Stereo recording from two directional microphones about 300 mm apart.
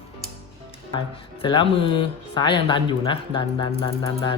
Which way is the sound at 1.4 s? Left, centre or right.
Centre.